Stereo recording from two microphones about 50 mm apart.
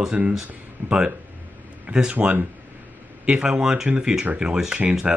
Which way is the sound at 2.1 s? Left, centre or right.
Right.